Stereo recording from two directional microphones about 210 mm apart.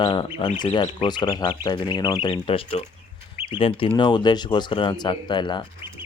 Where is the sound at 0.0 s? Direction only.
20° left (ahead or behind).